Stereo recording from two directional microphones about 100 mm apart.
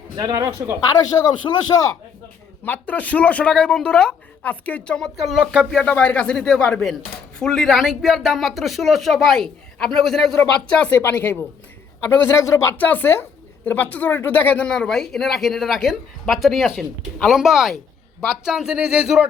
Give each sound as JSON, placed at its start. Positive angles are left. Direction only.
{"t": 0.2, "sound": "speech", "side_deg": -50}
{"t": 0.8, "sound": "speech", "side_deg": 40}
{"t": 2.6, "sound": "speech", "side_deg": 15}
{"t": 5.7, "sound": "speech", "side_deg": 10}